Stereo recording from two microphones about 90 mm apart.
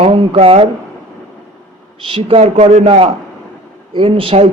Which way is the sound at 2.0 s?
80° right.